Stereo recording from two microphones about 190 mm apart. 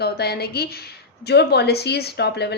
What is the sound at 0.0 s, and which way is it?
A woman's voice, 55° left (ahead or behind).